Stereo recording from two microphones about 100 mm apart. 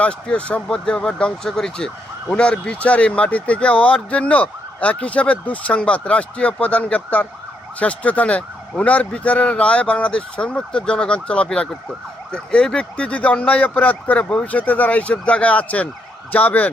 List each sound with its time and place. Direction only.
0.0 s speech: 10° left (ahead or behind)